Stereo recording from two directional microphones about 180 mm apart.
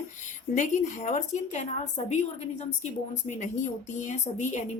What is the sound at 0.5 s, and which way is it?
A woman's voice, 40° left (ahead or behind).